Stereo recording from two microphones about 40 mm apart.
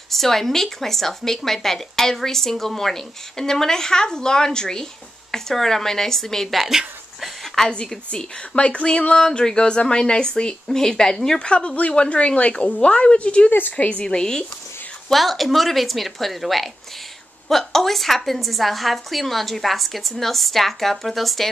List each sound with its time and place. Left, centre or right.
0.1 s a woman's voice: centre
6.5 s speech: centre
7.4 s a sound: centre
8.1 s speech: left
13.5 s a woman's voice: left
13.7 s a woman's voice: left
14.1 s a woman's voice: centre
15.0 s a woman's voice: centre